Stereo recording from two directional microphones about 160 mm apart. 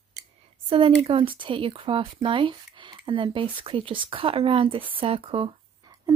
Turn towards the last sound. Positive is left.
turn(degrees=-35)  # may be behind; listen again after turning